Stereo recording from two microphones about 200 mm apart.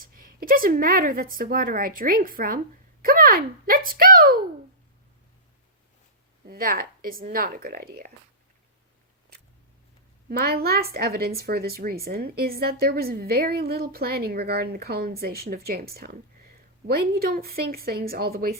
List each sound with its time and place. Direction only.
0.0 s a woman's voice: 45° right (ahead or behind)
6.4 s a woman's voice: 50° right (ahead or behind)
10.2 s a woman's voice: 50° right (ahead or behind)